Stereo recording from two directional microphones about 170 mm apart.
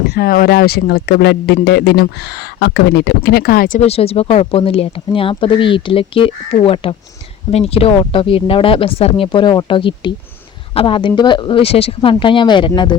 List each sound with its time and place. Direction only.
0.1 s speech: 65° left (ahead or behind)
3.8 s speech: 35° left (ahead or behind)